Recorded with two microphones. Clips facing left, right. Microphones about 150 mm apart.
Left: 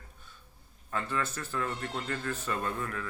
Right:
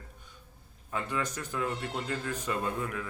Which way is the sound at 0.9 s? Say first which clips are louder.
Even; 15° right (ahead or behind).